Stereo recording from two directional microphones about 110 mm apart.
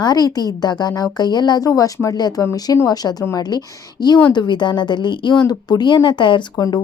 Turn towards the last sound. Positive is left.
turn(degrees=35)  # may be behind; listen again after turning